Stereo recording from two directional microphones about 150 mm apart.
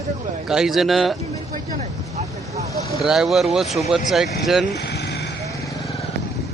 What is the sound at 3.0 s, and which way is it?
Speech, 5° right (ahead or behind).